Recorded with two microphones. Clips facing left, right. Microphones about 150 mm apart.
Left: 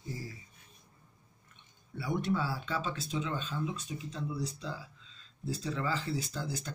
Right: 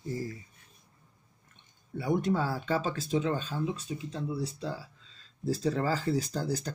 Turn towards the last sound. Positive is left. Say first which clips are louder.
# right 6 dB
turn(degrees=-40)  # may be behind; listen again after turning